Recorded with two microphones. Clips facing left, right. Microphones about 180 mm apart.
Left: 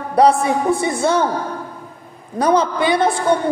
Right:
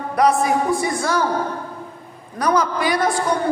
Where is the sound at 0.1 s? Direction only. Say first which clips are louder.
Left 3 dB; 30° left (ahead or behind).